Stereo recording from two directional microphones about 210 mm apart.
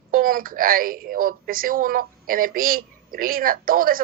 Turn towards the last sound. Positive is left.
turn(degrees=-45)  # may be behind; listen again after turning